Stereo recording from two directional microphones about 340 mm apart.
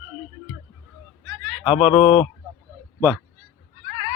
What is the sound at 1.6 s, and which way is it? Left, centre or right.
Speech, centre.